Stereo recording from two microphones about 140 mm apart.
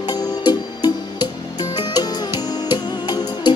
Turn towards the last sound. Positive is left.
turn(degrees=30)  # may be behind; listen again after turning